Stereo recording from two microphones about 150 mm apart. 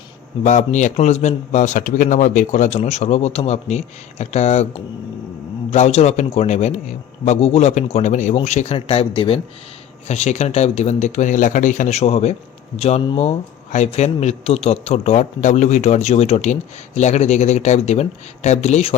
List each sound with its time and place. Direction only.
0.4 s a man's voice: 55° left (ahead or behind); by 9.4 s 35° left (ahead or behind)
10.1 s a man's voice: 50° left (ahead or behind)